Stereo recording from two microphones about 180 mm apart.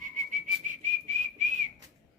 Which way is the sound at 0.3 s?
45° right (ahead or behind).